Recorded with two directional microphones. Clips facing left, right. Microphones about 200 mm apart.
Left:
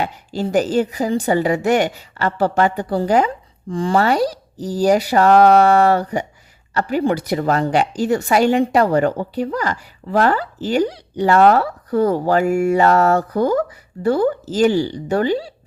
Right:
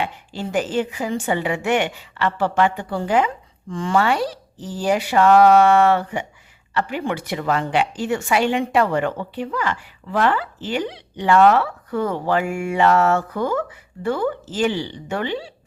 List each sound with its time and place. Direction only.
0.0 s a woman's voice: 40° left (ahead or behind)